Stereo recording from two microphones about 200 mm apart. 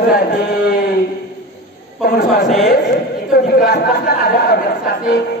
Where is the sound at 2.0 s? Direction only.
50° left (ahead or behind).